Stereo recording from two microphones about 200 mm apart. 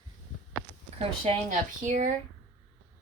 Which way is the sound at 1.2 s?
35° right (ahead or behind).